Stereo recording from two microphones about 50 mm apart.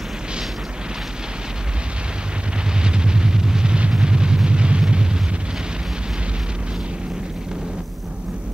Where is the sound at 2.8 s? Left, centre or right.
Centre.